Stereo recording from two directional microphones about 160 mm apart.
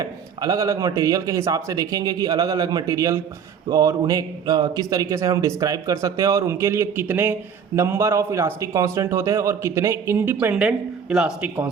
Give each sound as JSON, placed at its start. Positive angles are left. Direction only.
{"t": 0.0, "sound": "a man's voice", "side_deg": -25}